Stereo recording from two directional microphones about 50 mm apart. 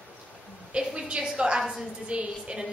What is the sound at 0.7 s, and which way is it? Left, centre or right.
A woman's voice, centre.